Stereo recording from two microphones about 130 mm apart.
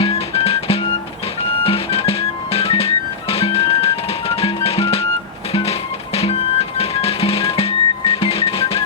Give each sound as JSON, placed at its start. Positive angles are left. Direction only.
{"t": 0.0, "sound": "music", "side_deg": 45}